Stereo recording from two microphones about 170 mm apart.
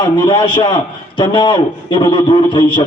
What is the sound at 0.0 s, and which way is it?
A man's voice, 25° left (ahead or behind).